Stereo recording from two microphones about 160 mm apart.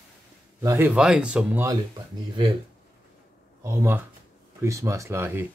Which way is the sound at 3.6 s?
15° right (ahead or behind).